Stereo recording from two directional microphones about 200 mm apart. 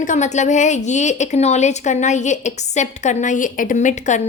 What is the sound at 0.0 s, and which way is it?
Speech, 35° left (ahead or behind).